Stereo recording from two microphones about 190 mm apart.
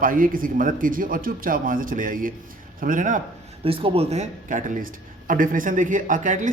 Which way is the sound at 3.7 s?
30° right (ahead or behind).